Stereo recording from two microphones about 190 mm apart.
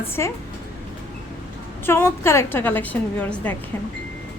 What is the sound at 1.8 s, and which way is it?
A woman's voice, 10° left (ahead or behind).